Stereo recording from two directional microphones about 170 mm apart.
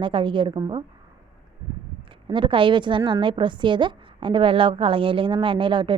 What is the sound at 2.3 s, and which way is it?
A woman's voice, 30° right (ahead or behind).